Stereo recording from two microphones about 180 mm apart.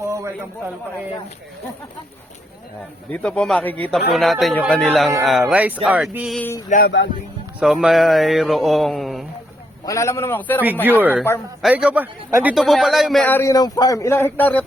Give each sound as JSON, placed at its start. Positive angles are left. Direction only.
{"t": 0.0, "sound": "a sound", "side_deg": -15}
{"t": 3.1, "sound": "a man's voice", "side_deg": 5}
{"t": 6.4, "sound": "speech", "side_deg": 15}
{"t": 6.7, "sound": "speech", "side_deg": 50}
{"t": 7.6, "sound": "a man's voice", "side_deg": -5}
{"t": 9.8, "sound": "speech", "side_deg": 20}
{"t": 10.8, "sound": "a man's voice", "side_deg": -10}